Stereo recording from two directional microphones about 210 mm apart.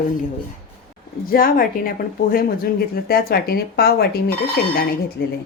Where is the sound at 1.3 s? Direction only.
45° left (ahead or behind).